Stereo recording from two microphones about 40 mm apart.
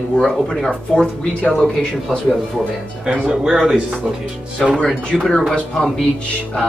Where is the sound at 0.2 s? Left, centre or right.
Centre.